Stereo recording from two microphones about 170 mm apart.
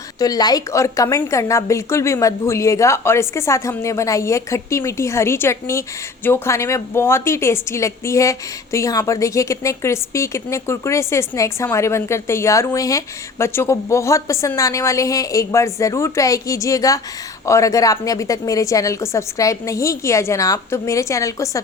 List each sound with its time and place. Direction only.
0.2 s a woman's voice: 25° left (ahead or behind)